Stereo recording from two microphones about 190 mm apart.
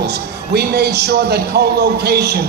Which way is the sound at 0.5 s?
60° right (ahead or behind).